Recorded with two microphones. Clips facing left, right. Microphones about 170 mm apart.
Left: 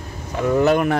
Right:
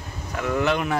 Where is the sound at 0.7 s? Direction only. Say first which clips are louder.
Left 6 dB; 50° left (ahead or behind).